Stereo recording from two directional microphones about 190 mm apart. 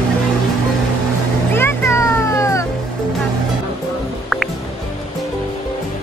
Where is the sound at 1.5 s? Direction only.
15° left (ahead or behind).